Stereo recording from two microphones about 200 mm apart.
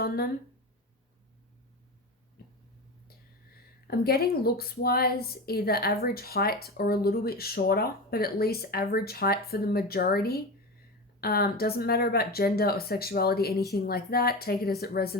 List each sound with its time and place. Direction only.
3.5 s speech: 50° left (ahead or behind)